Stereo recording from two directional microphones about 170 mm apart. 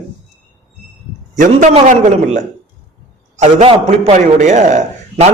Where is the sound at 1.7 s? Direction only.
45° right (ahead or behind).